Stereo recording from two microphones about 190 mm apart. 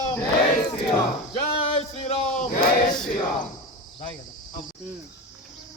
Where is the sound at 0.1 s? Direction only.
5° left (ahead or behind).